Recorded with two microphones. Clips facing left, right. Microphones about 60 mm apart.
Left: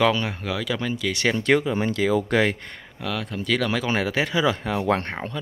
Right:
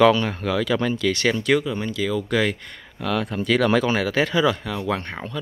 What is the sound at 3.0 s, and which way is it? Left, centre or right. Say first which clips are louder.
Speech: right 5 dB; centre.